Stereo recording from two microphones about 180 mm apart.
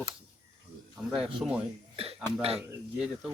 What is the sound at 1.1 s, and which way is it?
Speech, 5° right (ahead or behind).